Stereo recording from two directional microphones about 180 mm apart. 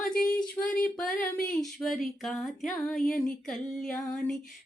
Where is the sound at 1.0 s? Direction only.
50° left (ahead or behind).